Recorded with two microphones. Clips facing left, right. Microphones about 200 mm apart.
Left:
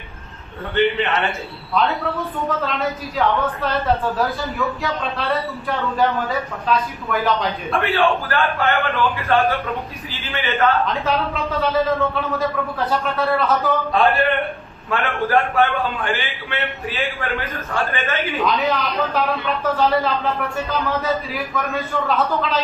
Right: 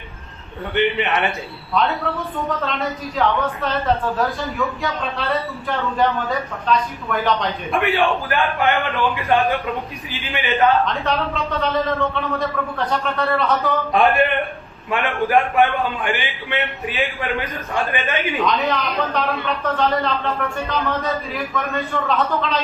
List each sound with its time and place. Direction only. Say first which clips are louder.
0.7 s a man's voice: left 1 dB; 15° right (ahead or behind)
1.7 s a woman's voice: even; centre (ahead or behind)
7.7 s a man's voice: even; 15° right (ahead or behind)
10.9 s a woman's voice: left 1 dB; centre (ahead or behind)
13.9 s a man's voice: right 2 dB; 15° right (ahead or behind)
18.4 s a woman's voice: left 1 dB; centre (ahead or behind)